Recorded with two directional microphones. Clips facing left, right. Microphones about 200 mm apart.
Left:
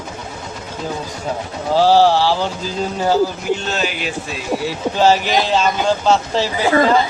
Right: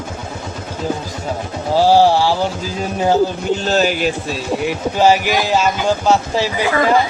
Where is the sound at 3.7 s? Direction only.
40° right (ahead or behind).